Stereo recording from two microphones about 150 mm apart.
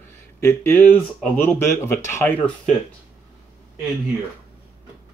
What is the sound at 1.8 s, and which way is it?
Speech, 15° left (ahead or behind).